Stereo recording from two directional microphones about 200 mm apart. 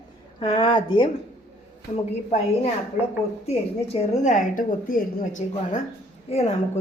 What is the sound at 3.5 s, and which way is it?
A woman's voice, 30° left (ahead or behind).